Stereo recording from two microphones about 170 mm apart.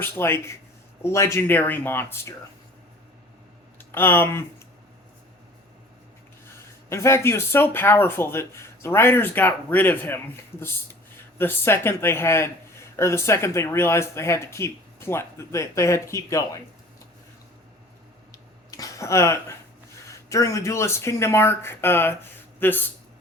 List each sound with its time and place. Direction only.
0.0 s speech: 15° left (ahead or behind)
3.8 s speech: 10° left (ahead or behind)
6.9 s speech: 15° left (ahead or behind)
11.3 s speech: 15° left (ahead or behind)
18.7 s speech: 20° left (ahead or behind)